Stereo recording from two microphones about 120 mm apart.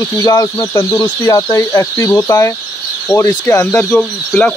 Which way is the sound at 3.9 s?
10° left (ahead or behind).